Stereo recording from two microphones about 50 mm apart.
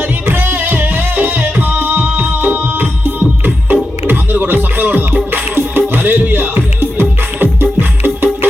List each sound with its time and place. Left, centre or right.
0.3 s music: right